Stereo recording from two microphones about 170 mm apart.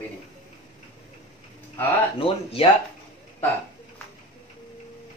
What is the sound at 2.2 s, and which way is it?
Speech, 30° left (ahead or behind).